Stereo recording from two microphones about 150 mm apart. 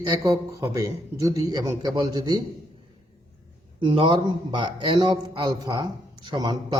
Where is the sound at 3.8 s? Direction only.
35° right (ahead or behind).